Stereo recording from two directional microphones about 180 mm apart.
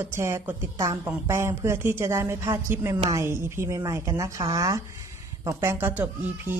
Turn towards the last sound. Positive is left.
turn(degrees=-10)  # may be behind; listen again after turning